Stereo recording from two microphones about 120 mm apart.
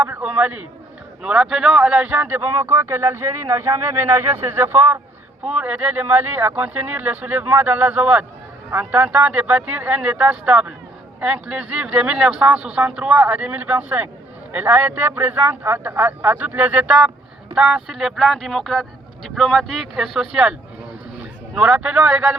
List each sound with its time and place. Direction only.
0.0 s speech: 10° right (ahead or behind)
5.5 s speech: 10° right (ahead or behind)